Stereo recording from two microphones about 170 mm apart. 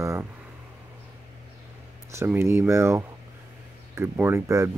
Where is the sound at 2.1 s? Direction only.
15° right (ahead or behind).